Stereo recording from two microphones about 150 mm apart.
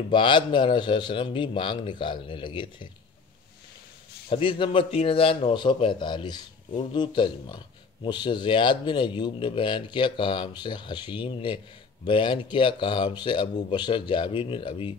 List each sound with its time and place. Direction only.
0.1 s speech: 35° left (ahead or behind)
4.3 s speech: 35° left (ahead or behind)